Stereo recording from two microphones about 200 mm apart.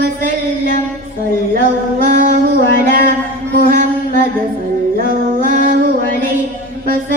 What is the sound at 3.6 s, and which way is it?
Mantra, 45° right (ahead or behind).